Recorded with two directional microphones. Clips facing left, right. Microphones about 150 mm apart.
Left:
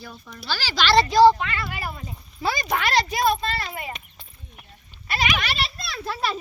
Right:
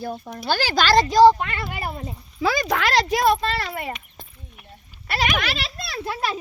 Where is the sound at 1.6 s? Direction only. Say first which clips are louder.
Right 3 dB; 50° right (ahead or behind).